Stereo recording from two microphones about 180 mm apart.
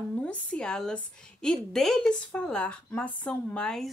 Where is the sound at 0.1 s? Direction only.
5° left (ahead or behind).